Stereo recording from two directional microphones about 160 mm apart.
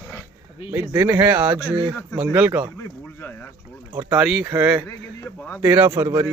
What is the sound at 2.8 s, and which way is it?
Speech, 15° left (ahead or behind).